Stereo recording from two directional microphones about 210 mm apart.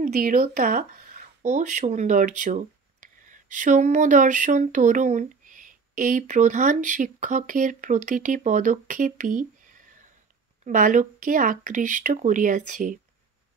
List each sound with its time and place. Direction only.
0.0 s speech: 40° right (ahead or behind)